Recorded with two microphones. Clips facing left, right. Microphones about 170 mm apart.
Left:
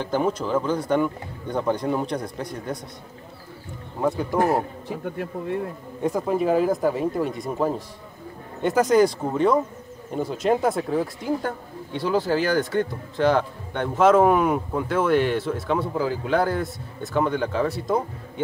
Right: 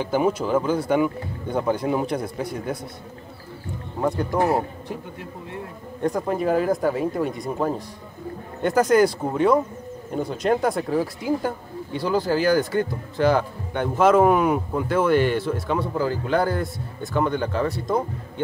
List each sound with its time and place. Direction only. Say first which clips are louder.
0.0 s speech: right 2 dB; 10° right (ahead or behind)
4.0 s a man's voice: even; centre (ahead or behind)
5.0 s speech: left 8 dB; 55° left (ahead or behind)
6.0 s speech: left 1 dB; 5° left (ahead or behind)